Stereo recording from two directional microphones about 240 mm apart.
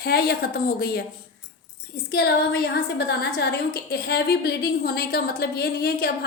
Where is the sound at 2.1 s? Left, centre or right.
Left.